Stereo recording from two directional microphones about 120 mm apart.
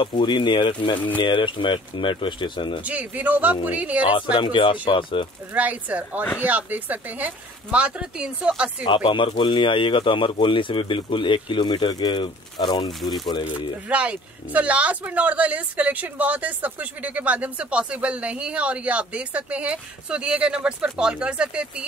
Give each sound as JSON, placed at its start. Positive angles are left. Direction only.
{"t": 0.0, "sound": "speech", "side_deg": 45}
{"t": 2.8, "sound": "speech", "side_deg": -10}
{"t": 4.4, "sound": "speech", "side_deg": 45}
{"t": 5.5, "sound": "speech", "side_deg": -10}
{"t": 8.8, "sound": "speech", "side_deg": 40}
{"t": 13.0, "sound": "speech", "side_deg": 0}
{"t": 13.8, "sound": "speech", "side_deg": -10}